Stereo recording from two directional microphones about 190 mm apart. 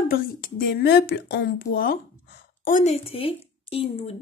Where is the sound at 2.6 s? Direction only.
40° left (ahead or behind).